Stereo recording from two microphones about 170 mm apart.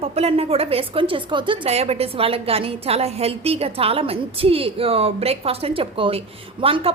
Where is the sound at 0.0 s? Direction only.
35° right (ahead or behind).